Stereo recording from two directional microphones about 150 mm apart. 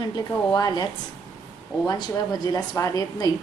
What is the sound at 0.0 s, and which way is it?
A woman's voice, 25° left (ahead or behind).